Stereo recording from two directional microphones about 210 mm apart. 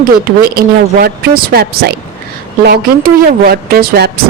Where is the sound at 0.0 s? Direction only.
45° right (ahead or behind).